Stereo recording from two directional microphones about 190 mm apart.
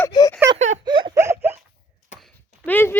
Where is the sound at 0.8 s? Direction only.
25° right (ahead or behind).